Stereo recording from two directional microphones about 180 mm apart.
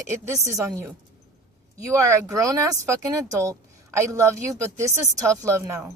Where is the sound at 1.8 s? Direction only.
15° right (ahead or behind).